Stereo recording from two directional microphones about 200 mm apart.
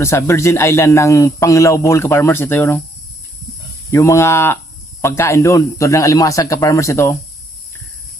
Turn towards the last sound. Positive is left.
turn(degrees=15)  # may be behind; listen again after turning